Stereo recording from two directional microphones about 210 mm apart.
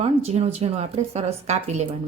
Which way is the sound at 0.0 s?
30° right (ahead or behind).